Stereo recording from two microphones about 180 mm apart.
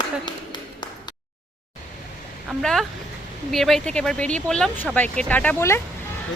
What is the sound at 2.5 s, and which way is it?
Speech, centre (ahead or behind).